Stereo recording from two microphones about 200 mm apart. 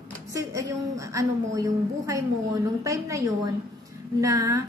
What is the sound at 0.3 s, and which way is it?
Speech, 15° right (ahead or behind).